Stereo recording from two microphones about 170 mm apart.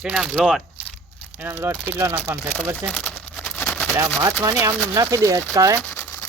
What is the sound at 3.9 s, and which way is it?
Speech, 15° right (ahead or behind).